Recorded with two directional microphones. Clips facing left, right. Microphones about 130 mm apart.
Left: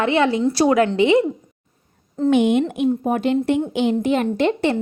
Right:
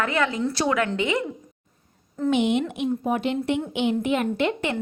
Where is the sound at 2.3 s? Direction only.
50° left (ahead or behind).